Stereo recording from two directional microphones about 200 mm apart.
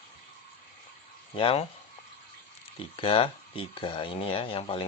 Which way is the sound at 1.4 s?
25° left (ahead or behind).